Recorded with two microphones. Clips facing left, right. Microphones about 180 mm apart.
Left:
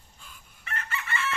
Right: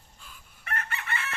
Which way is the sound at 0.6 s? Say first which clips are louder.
Right 1 dB; 50° right (ahead or behind).